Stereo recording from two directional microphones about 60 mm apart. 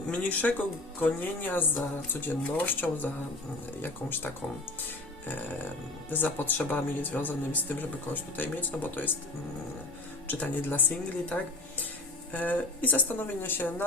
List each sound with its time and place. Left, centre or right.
0.1 s speech: left
6.1 s speech: left
10.2 s speech: left